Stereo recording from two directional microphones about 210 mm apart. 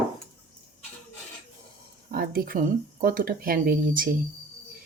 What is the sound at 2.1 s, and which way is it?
Speech, 45° right (ahead or behind).